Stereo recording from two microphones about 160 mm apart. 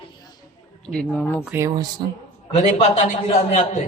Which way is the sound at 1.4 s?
15° right (ahead or behind).